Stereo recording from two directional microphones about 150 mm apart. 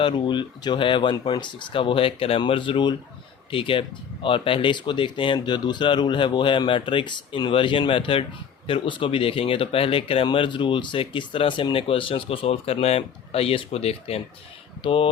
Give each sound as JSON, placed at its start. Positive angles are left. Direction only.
{"t": 0.0, "sound": "speech", "side_deg": 30}